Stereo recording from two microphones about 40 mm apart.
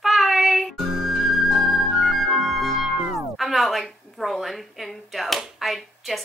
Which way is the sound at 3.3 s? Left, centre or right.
Centre.